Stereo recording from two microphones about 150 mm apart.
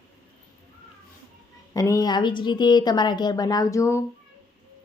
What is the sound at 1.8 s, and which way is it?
A woman's voice, 20° left (ahead or behind).